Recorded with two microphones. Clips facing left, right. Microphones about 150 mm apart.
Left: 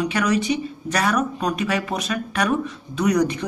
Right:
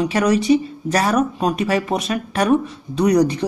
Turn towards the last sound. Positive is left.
turn(degrees=-30)  # may be behind; listen again after turning